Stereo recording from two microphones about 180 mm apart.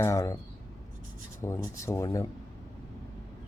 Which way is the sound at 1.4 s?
15° left (ahead or behind).